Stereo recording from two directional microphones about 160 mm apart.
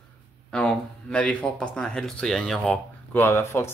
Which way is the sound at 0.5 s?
5° left (ahead or behind).